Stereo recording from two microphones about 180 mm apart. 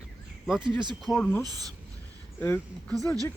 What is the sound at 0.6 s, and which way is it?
Speech, 25° right (ahead or behind).